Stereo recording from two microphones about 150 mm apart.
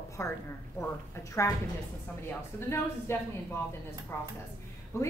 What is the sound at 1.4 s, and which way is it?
A woman's voice, 20° left (ahead or behind).